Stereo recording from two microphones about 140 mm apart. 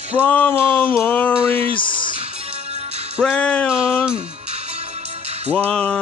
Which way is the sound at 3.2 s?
10° left (ahead or behind).